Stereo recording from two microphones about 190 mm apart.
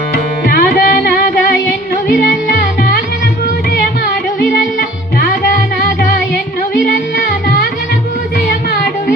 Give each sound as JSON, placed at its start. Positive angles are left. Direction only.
{"t": 0.5, "sound": "music", "side_deg": 50}